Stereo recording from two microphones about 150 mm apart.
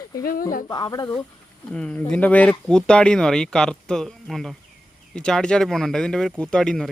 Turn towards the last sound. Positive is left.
turn(degrees=5)  # may be behind; listen again after turning